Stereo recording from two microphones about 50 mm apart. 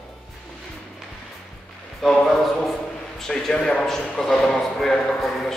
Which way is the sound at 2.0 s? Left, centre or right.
Centre.